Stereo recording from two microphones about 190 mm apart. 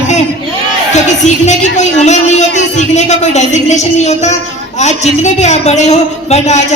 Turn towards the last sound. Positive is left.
turn(degrees=35)  # may be behind; listen again after turning